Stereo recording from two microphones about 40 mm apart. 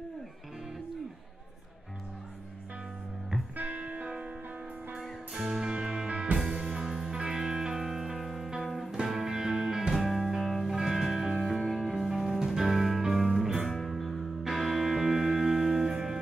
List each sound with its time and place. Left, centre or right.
3.5 s music: right
5.3 s music: centre
11.6 s music: centre